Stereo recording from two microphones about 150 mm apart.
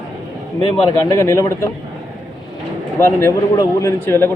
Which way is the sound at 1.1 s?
20° left (ahead or behind).